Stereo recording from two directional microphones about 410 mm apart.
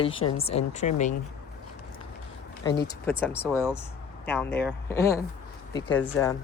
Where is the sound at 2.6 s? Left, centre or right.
Centre.